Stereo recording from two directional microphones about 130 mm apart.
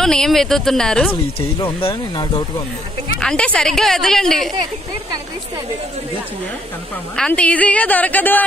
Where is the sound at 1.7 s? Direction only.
45° left (ahead or behind).